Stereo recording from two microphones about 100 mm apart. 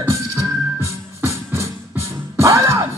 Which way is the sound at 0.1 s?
30° right (ahead or behind).